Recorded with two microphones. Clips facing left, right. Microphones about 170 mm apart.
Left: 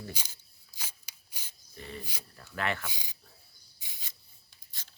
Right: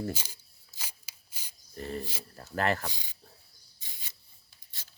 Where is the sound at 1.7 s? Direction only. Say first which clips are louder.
Right 7 dB; 45° right (ahead or behind).